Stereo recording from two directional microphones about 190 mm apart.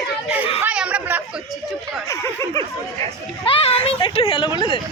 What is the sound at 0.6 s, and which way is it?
Chatter, 5° right (ahead or behind).